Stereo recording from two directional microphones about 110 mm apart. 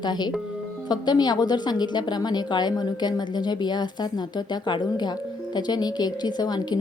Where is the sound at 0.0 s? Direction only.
40° left (ahead or behind).